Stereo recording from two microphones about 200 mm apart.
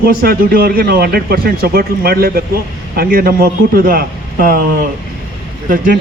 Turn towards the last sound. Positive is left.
turn(degrees=-45)  # may be behind; listen again after turning